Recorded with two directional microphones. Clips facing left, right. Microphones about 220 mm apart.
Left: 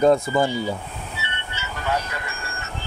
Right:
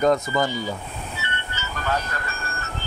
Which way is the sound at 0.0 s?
30° left (ahead or behind).